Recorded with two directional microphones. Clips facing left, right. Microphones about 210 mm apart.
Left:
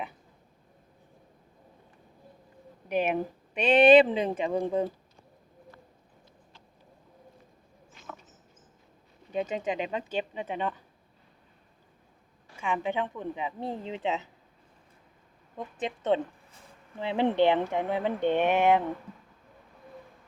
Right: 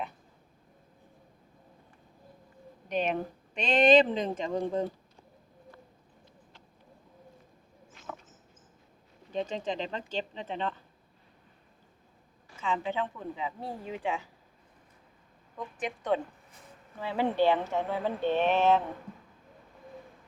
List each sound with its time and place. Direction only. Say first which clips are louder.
2.9 s speech: left 3 dB; 5° left (ahead or behind)
9.3 s speech: left 2 dB; 10° left (ahead or behind)
12.5 s a woman's voice: left 2 dB; 15° left (ahead or behind)
15.5 s a woman's voice: left 2 dB; 25° left (ahead or behind)